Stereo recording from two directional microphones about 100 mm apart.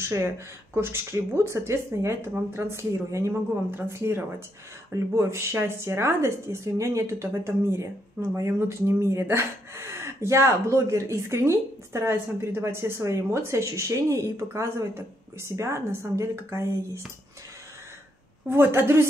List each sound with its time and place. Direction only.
0.7 s a woman's voice: 25° right (ahead or behind)
18.5 s a woman's voice: 25° right (ahead or behind)